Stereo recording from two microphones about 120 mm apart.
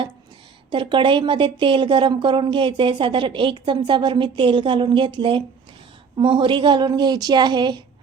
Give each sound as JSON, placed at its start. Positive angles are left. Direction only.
{"t": 0.7, "sound": "a woman's voice", "side_deg": -45}